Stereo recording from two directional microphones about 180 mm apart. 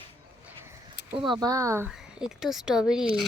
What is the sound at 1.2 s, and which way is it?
Speech, 25° right (ahead or behind).